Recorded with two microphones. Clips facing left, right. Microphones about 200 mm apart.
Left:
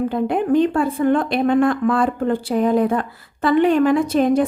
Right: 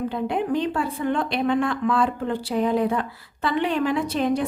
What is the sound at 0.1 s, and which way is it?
A woman's voice, 50° left (ahead or behind).